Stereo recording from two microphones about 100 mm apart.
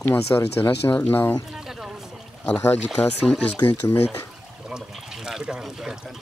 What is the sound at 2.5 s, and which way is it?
Speech, 25° left (ahead or behind).